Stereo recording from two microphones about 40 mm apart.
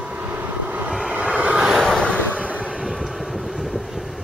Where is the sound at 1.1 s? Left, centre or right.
Right.